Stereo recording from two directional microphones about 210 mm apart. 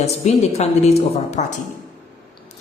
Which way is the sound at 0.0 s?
30° left (ahead or behind).